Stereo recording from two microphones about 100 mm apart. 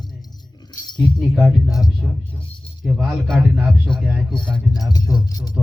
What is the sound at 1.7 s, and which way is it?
Speech, 35° left (ahead or behind).